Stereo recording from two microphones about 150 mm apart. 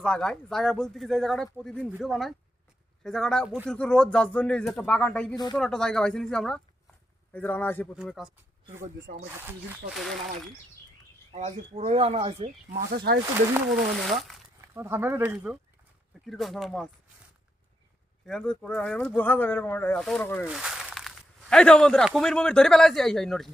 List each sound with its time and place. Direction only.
0.0 s speech: 5° left (ahead or behind)
8.0 s speech: centre (ahead or behind)
9.4 s speech: 15° right (ahead or behind)
9.9 s speech: centre (ahead or behind)
11.3 s speech: 45° right (ahead or behind)
12.7 s speech: 90° right
14.1 s speech: centre (ahead or behind)
14.7 s speech: 15° right (ahead or behind)
16.2 s speech: centre (ahead or behind)
18.3 s speech: 5° left (ahead or behind)
20.0 s speech: 5° left (ahead or behind)
20.4 s a sound: 5° right (ahead or behind)
22.1 s speech: 5° left (ahead or behind)